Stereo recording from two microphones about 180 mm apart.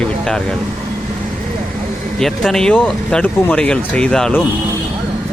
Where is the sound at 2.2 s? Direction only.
Centre (ahead or behind).